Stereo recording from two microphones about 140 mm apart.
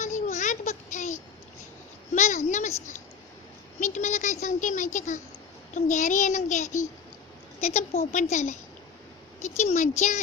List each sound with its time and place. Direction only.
0.0 s a sound: 60° left (ahead or behind)
3.8 s speech: 60° left (ahead or behind)
9.6 s speech: 55° left (ahead or behind)